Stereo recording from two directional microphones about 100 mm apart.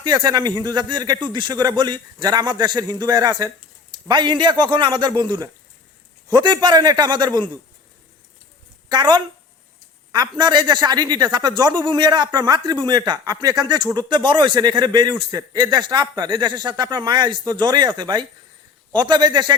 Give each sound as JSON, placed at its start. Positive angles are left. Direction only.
{"t": 0.0, "sound": "speech", "side_deg": -45}
{"t": 8.9, "sound": "speech", "side_deg": -50}